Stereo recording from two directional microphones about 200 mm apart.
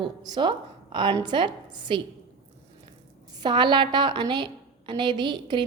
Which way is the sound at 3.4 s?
20° right (ahead or behind).